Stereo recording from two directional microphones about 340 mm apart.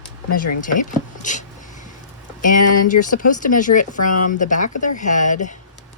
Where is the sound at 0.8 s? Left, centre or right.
Left.